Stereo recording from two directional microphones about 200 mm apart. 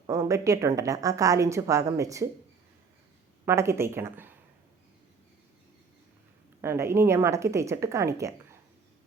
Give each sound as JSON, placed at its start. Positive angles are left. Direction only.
{"t": 0.1, "sound": "a woman's voice", "side_deg": -15}
{"t": 3.4, "sound": "speech", "side_deg": -15}
{"t": 6.6, "sound": "a woman's voice", "side_deg": -15}